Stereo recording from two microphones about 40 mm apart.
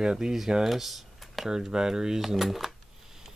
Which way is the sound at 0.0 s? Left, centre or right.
Centre.